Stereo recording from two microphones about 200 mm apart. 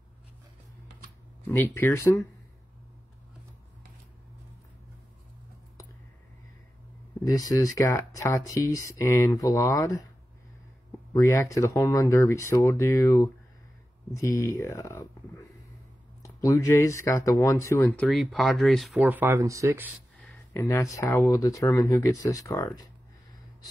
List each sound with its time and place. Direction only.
1.5 s speech: 10° left (ahead or behind)
7.2 s speech: 15° left (ahead or behind)
11.1 s speech: 15° left (ahead or behind)
16.2 s speech: 15° left (ahead or behind)
18.0 s speech: centre (ahead or behind)
20.2 s speech: 10° left (ahead or behind)